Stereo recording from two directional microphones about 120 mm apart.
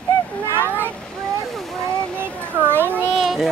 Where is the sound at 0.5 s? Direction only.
20° right (ahead or behind).